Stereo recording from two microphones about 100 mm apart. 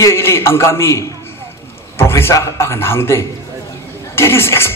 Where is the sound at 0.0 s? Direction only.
25° left (ahead or behind).